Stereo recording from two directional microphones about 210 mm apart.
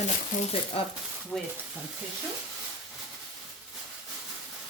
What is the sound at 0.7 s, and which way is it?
Speech, 25° left (ahead or behind).